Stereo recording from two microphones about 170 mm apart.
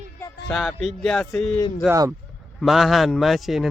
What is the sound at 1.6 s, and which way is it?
Speech, 20° left (ahead or behind).